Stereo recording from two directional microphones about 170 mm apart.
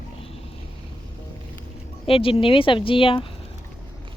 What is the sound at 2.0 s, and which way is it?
Speech, 35° left (ahead or behind).